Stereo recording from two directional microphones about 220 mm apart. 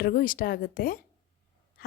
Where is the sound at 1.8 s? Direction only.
40° left (ahead or behind).